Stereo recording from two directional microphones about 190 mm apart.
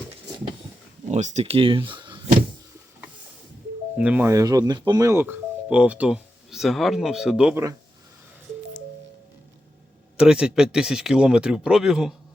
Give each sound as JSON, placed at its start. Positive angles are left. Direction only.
{"t": 1.0, "sound": "speech", "side_deg": -35}
{"t": 3.9, "sound": "speech", "side_deg": -5}
{"t": 10.2, "sound": "speech", "side_deg": -5}